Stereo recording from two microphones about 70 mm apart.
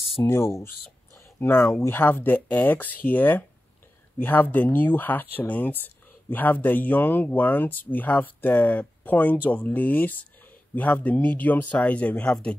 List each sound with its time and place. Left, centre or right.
0.2 s speech: left
1.4 s speech: left
2.0 s speech: left